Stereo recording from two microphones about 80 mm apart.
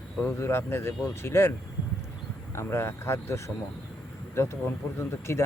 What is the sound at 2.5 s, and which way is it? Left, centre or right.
Speech, left.